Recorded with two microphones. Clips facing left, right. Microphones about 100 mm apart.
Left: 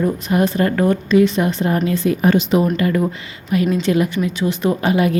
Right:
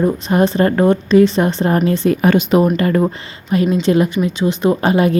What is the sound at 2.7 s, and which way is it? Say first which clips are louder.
A woman's voice: right 3 dB; 40° right (ahead or behind).